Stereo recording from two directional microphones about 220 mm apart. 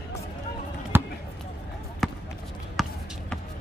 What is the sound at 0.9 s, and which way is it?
Basketball bounce, 10° right (ahead or behind).